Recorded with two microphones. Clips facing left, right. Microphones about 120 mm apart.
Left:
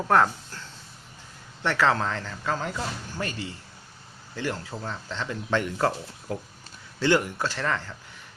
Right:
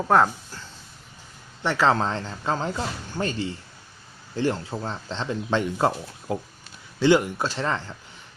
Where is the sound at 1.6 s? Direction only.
20° right (ahead or behind).